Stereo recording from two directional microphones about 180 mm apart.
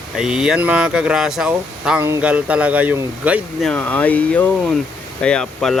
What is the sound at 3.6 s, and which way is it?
Speech, 10° left (ahead or behind).